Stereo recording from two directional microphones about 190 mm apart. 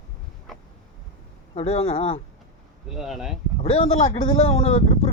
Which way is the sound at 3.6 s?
35° left (ahead or behind).